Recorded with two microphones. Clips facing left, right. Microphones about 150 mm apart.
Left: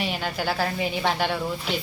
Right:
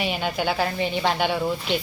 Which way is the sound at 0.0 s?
Centre (ahead or behind).